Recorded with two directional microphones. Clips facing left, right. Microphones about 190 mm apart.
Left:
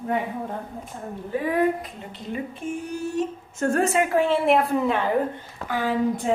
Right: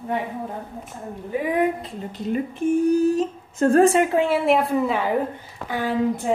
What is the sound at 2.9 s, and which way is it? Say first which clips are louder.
Speech: right 8 dB; 35° right (ahead or behind).